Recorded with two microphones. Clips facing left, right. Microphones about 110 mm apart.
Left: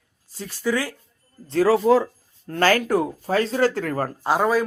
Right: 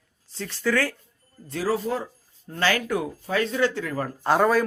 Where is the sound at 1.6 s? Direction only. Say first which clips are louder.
Left 9 dB; 85° left.